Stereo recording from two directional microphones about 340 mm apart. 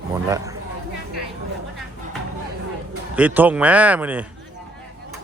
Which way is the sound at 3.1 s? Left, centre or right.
Centre.